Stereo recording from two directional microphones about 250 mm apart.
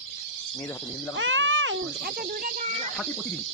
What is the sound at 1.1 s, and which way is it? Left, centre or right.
Speech, right.